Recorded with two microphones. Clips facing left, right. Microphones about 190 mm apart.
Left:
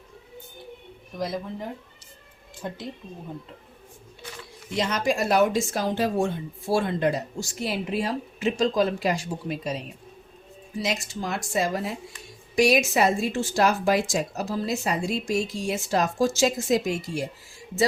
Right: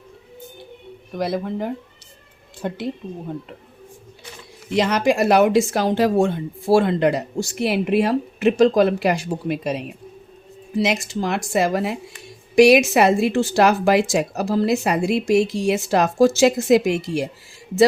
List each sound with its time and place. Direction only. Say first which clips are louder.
1.1 s speech: right 7 dB; 70° right (ahead or behind)
4.7 s speech: right 7 dB; 75° right (ahead or behind)
10.8 s speech: right 8 dB; 80° right